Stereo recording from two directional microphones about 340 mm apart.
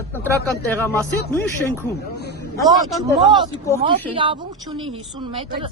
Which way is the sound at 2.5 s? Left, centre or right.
Centre.